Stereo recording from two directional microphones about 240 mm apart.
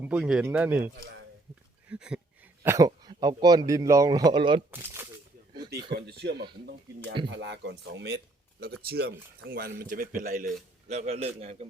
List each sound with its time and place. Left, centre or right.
0.0 s speech: centre
1.9 s a sound: centre
2.6 s a man's voice: centre
5.5 s a man's voice: right